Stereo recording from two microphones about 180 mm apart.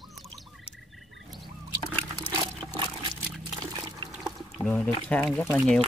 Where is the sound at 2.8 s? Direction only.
25° right (ahead or behind).